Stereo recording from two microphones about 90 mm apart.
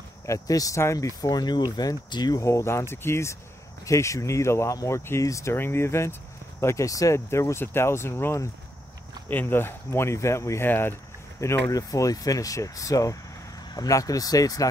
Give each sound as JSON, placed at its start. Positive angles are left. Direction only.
{"t": 0.3, "sound": "speech", "side_deg": 40}
{"t": 2.4, "sound": "speech", "side_deg": 30}